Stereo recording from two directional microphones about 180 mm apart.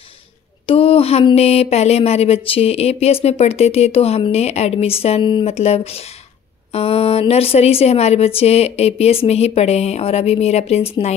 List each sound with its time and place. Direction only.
0.7 s speech: 35° left (ahead or behind)